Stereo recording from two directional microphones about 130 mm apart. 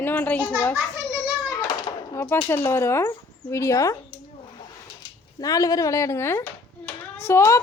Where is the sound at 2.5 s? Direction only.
20° left (ahead or behind).